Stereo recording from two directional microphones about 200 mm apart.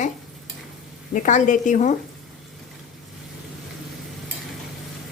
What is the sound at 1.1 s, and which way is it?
Speech, 40° left (ahead or behind).